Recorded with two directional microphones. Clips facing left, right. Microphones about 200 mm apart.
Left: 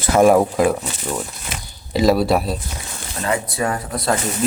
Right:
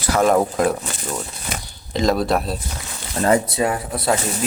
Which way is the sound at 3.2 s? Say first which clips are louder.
Right 5 dB; 40° right (ahead or behind).